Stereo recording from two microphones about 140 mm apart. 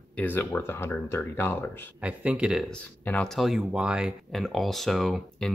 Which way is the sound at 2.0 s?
10° right (ahead or behind).